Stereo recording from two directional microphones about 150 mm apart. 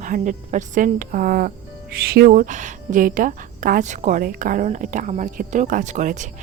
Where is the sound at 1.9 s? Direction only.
90° right.